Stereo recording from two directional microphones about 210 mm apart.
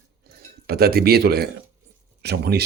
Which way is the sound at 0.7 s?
45° right (ahead or behind).